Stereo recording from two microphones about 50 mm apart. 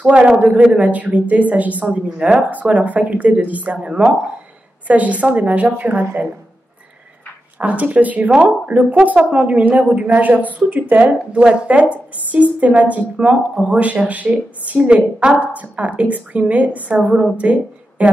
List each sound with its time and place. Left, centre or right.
0.1 s a woman's voice: right
0.8 s a woman's voice: right
7.5 s a woman's voice: right